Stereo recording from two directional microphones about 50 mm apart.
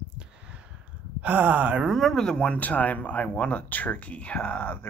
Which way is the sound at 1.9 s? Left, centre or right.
Centre.